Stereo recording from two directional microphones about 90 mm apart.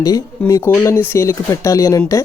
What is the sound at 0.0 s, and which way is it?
Speech, 40° left (ahead or behind).